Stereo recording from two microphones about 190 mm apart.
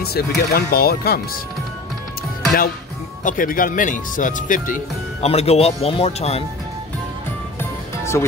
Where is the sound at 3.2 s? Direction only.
45° left (ahead or behind).